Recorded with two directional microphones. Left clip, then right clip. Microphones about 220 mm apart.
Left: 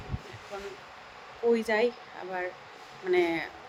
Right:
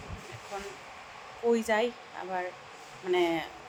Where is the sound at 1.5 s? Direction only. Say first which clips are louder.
Left 1 dB; 15° left (ahead or behind).